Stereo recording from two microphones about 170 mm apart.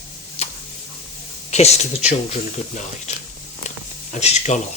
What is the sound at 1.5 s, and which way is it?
Speech, 40° left (ahead or behind).